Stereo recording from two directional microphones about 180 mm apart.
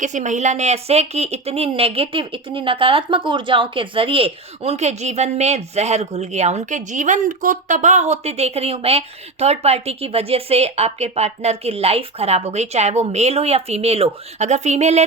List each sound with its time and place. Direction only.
0.0 s speech: 40° right (ahead or behind)